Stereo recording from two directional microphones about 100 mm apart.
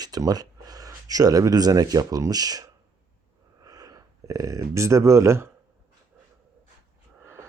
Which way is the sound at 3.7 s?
35° right (ahead or behind).